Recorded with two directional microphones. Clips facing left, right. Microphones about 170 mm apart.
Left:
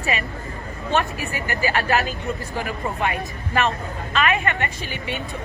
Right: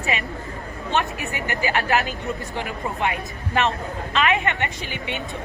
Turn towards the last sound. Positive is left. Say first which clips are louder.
# left 1 dB
turn(degrees=-20)  # may be behind; listen again after turning